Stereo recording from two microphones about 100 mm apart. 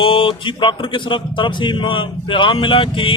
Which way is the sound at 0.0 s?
60° left (ahead or behind).